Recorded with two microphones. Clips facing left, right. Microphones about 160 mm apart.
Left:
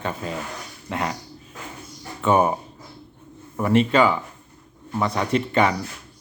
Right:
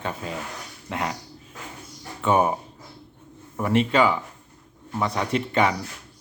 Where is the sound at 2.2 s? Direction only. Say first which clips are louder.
Left 2 dB; 10° right (ahead or behind).